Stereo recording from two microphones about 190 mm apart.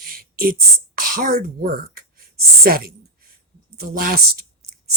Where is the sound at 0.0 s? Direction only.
50° right (ahead or behind).